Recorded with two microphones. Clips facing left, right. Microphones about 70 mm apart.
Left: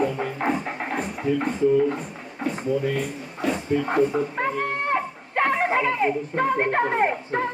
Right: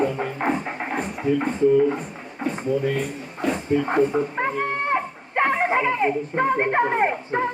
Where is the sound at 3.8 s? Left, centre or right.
Centre.